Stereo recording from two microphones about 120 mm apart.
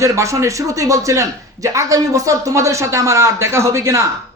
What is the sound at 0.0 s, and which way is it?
Speech, 25° right (ahead or behind).